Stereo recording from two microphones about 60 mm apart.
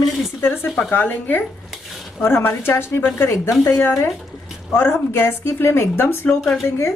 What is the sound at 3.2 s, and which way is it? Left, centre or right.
Speech, left.